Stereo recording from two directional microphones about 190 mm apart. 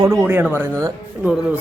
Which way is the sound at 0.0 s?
15° right (ahead or behind).